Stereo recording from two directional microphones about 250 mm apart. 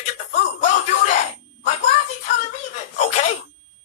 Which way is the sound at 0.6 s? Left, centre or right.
Left.